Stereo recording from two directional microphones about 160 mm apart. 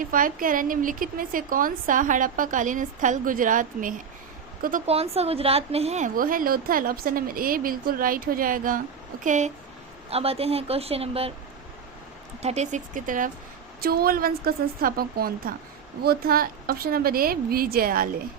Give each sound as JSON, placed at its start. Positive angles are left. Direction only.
{"t": 0.0, "sound": "a woman's voice", "side_deg": -60}
{"t": 4.9, "sound": "a woman's voice", "side_deg": -40}
{"t": 6.1, "sound": "a woman's voice", "side_deg": -60}
{"t": 9.2, "sound": "speech", "side_deg": -50}
{"t": 10.1, "sound": "a woman's voice", "side_deg": -40}
{"t": 12.4, "sound": "speech", "side_deg": -45}
{"t": 13.8, "sound": "a woman's voice", "side_deg": -70}